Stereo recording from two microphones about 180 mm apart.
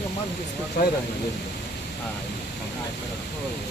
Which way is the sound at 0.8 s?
50° left (ahead or behind).